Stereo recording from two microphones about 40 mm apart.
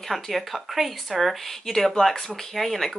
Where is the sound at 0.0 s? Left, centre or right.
Centre.